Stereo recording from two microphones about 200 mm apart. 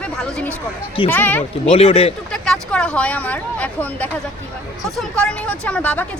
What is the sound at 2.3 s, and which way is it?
Speech, 5° left (ahead or behind).